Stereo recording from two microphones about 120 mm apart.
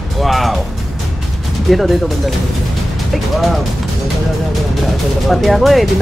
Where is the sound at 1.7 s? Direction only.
Centre (ahead or behind).